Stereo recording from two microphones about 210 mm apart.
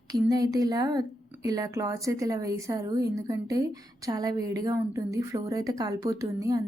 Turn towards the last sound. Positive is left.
turn(degrees=-15)  # may be behind; listen again after turning